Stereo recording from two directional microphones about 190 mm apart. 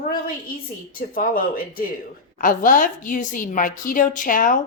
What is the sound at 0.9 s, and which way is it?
A woman's voice, 50° left (ahead or behind).